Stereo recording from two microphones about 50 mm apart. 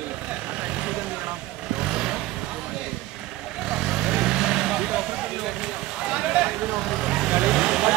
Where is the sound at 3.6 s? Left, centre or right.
Centre.